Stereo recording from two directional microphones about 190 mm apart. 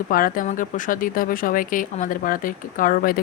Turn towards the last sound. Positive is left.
turn(degrees=50)  # may be behind; listen again after turning